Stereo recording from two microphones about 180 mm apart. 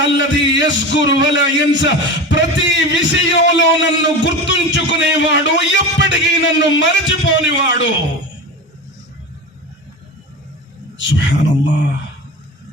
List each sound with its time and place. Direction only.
0.0 s a man's voice: 85° left
10.9 s a man's voice: 90° left